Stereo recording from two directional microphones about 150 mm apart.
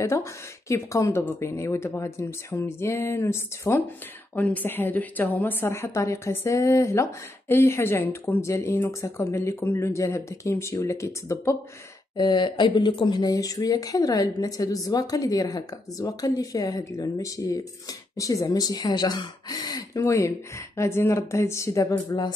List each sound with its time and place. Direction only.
0.0 s a woman's voice: 20° left (ahead or behind)
12.2 s speech: 30° left (ahead or behind)